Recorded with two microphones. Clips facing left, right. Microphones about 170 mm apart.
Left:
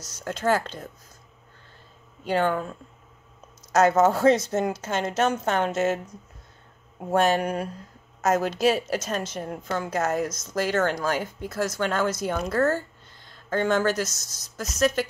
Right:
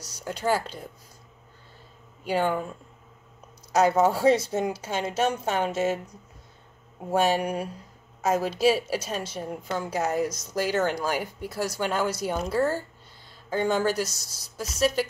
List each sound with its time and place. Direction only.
0.1 s a woman's voice: 10° right (ahead or behind)
2.2 s a woman's voice: 10° right (ahead or behind)
3.7 s a woman's voice: 10° right (ahead or behind)
7.2 s a woman's voice: 10° right (ahead or behind)